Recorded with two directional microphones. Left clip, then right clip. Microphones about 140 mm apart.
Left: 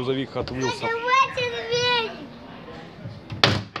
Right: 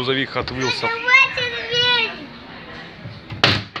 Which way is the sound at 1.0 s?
90° left.